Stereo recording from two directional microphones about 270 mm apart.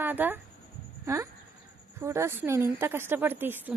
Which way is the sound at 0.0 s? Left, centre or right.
Centre.